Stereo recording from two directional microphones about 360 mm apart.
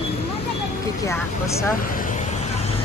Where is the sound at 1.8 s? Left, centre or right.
Left.